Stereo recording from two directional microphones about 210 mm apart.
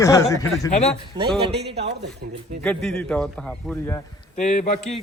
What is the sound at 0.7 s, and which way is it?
Speech, 30° left (ahead or behind).